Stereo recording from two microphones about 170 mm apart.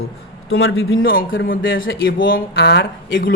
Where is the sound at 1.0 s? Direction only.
60° left (ahead or behind).